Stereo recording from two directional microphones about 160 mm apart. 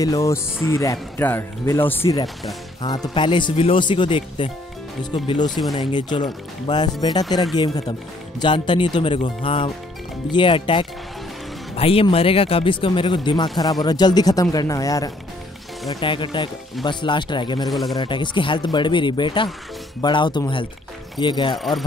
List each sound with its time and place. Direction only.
0.0 s speech: 20° left (ahead or behind)
2.8 s speech: 25° left (ahead or behind)
17.6 s speech: centre (ahead or behind)
17.9 s speech: 30° left (ahead or behind)
21.5 s speech: centre (ahead or behind)